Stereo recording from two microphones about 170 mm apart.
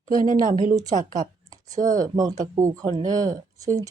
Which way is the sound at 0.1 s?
55° right (ahead or behind).